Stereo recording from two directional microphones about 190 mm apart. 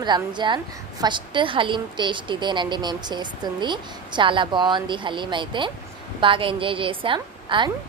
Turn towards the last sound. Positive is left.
turn(degrees=-25)  # may be behind; listen again after turning